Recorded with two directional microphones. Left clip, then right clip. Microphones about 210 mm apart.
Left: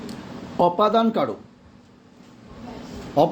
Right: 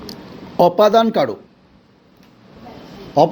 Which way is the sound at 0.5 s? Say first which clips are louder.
Right 6 dB; 30° right (ahead or behind).